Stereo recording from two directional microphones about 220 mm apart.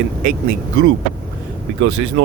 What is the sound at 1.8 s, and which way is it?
Speech, 65° right (ahead or behind).